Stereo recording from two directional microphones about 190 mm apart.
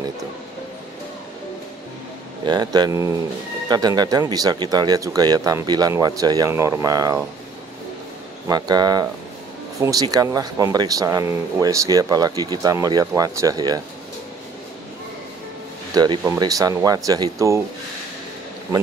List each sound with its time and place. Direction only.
2.4 s speech: 20° right (ahead or behind)
8.5 s speech: 20° right (ahead or behind)
15.9 s speech: 20° right (ahead or behind)